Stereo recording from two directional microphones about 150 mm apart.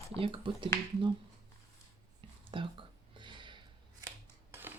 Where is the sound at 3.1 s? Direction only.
30° right (ahead or behind).